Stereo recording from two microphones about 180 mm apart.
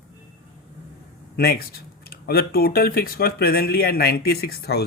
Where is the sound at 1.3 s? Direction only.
60° left (ahead or behind).